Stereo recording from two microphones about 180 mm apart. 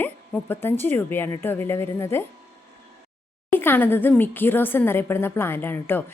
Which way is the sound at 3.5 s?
10° left (ahead or behind).